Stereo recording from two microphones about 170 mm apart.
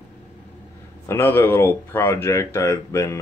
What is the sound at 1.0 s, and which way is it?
Speech, 15° left (ahead or behind).